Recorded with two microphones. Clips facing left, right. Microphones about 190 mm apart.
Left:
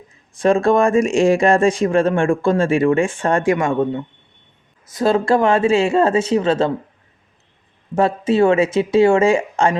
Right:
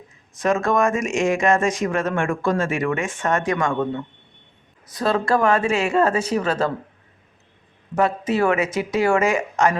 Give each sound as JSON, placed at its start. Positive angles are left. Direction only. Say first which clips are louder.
{"t": 0.3, "sound": "speech", "louder": "left 5 dB", "side_deg": 30}
{"t": 7.9, "sound": "speech", "louder": "left 5 dB", "side_deg": 30}